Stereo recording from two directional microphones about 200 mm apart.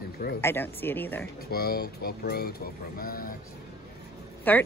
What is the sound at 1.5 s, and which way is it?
Speech, 50° left (ahead or behind).